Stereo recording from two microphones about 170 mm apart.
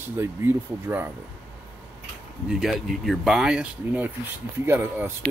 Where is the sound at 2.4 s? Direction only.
Centre (ahead or behind).